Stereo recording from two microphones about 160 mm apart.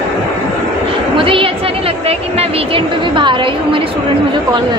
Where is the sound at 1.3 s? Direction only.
35° right (ahead or behind).